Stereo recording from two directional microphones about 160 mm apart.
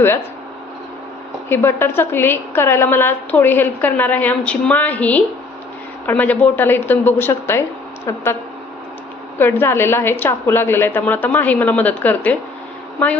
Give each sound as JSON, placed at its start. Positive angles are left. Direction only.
{"t": 1.5, "sound": "a woman's voice", "side_deg": 15}
{"t": 9.4, "sound": "a woman's voice", "side_deg": 15}